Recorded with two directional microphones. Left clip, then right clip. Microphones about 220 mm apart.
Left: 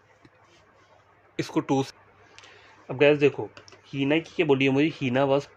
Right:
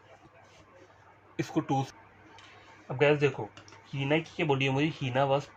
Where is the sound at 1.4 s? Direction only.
40° left (ahead or behind).